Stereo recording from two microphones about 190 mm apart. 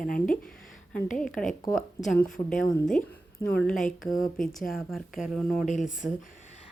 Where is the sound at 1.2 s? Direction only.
5° left (ahead or behind).